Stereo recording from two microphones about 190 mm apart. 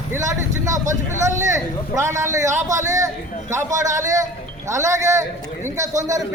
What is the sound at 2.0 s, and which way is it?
A man's voice, 15° right (ahead or behind).